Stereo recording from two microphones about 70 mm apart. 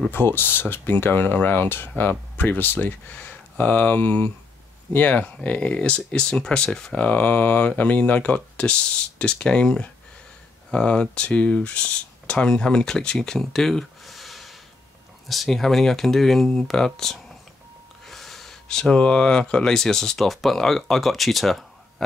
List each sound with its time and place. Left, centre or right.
0.1 s speech: left; by 22.0 s centre